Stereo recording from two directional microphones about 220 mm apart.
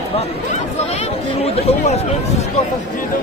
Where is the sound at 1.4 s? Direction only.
30° left (ahead or behind).